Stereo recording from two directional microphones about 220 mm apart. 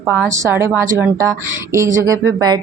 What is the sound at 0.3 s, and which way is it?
A woman's voice, 10° right (ahead or behind).